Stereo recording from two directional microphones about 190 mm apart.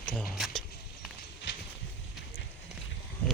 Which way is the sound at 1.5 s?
70° left (ahead or behind).